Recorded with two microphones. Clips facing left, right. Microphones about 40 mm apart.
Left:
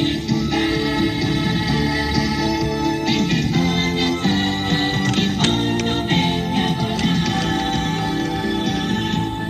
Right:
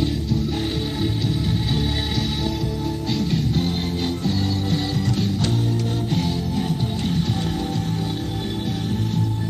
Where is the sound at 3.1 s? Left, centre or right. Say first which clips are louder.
Left 4 dB; left.